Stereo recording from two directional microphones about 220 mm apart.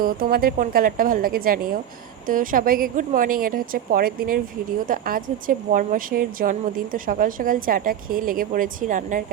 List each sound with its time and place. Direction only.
0.0 s a woman's voice: 40° right (ahead or behind)